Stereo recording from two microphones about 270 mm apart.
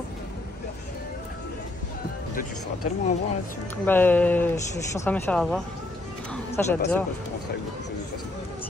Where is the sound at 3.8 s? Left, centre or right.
Centre.